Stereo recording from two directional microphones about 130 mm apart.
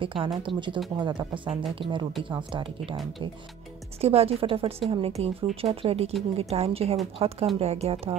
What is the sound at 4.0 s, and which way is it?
Speech, 50° right (ahead or behind).